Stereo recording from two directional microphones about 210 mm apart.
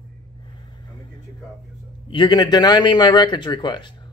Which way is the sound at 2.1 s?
20° left (ahead or behind).